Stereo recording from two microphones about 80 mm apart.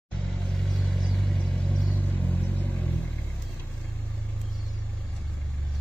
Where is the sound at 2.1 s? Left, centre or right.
Left.